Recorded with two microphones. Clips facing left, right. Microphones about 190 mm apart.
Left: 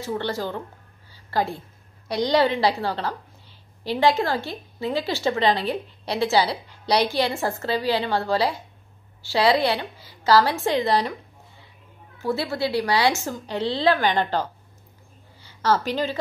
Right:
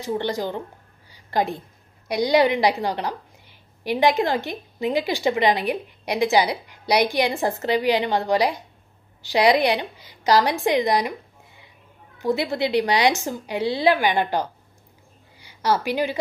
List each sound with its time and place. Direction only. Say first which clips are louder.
0.0 s a woman's voice: right 2 dB; 15° right (ahead or behind)
1.1 s a sound: right 2 dB; 20° right (ahead or behind)
2.0 s a woman's voice: right 2 dB; 10° right (ahead or behind)